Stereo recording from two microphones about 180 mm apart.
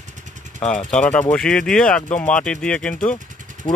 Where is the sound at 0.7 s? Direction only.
5° left (ahead or behind).